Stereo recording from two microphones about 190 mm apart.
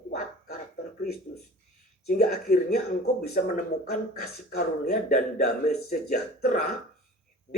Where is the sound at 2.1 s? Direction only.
45° left (ahead or behind).